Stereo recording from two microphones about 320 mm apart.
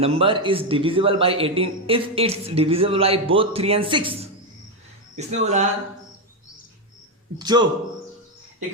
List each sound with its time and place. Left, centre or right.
0.0 s a man's voice: centre
7.3 s a man's voice: centre